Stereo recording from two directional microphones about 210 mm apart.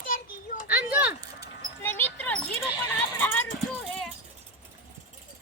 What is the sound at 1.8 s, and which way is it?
Dog, 10° left (ahead or behind).